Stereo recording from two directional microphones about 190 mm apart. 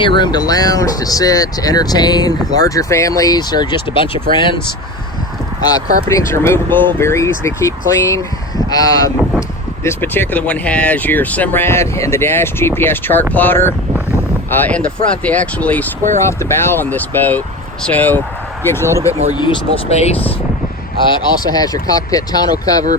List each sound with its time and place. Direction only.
0.0 s speech: 25° left (ahead or behind)
6.1 s speech: 15° left (ahead or behind)
19.3 s speech: 25° left (ahead or behind)
21.5 s speech: 20° left (ahead or behind)